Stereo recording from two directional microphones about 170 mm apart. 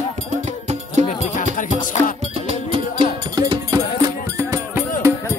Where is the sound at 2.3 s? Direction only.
35° right (ahead or behind).